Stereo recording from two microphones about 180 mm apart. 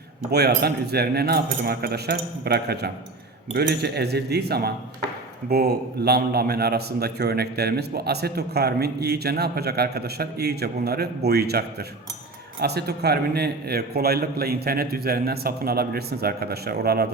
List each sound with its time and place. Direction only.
0.3 s a man's voice: 65° right (ahead or behind)